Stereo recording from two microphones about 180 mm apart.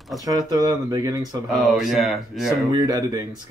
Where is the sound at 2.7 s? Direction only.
20° right (ahead or behind).